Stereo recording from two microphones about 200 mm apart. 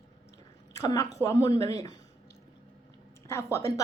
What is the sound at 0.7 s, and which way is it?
A woman's voice, 15° left (ahead or behind).